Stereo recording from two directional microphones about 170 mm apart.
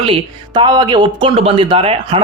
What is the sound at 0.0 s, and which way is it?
Speech, 30° right (ahead or behind).